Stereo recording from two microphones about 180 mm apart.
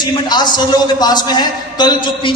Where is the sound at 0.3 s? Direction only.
25° left (ahead or behind).